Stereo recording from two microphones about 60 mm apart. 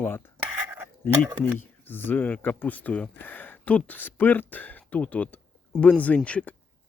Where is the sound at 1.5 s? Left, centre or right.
Left.